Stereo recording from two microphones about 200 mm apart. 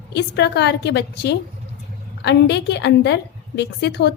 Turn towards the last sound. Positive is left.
turn(degrees=55)  # may be behind; listen again after turning